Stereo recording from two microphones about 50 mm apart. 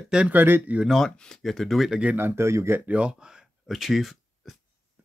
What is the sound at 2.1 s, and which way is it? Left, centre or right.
Speech, right.